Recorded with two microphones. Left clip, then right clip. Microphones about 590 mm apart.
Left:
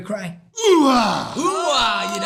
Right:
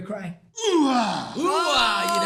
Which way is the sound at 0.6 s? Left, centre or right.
Left.